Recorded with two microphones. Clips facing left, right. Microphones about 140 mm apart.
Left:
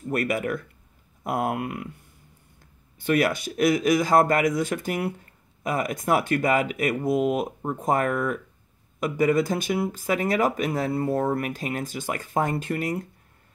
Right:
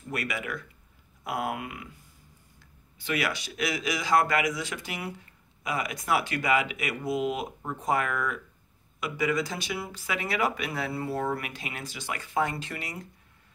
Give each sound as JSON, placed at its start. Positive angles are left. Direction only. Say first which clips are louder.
{"t": 0.1, "sound": "speech", "louder": "left 8 dB", "side_deg": 50}